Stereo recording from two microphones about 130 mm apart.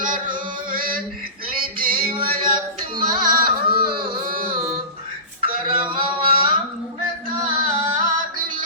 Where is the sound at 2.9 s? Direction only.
35° right (ahead or behind).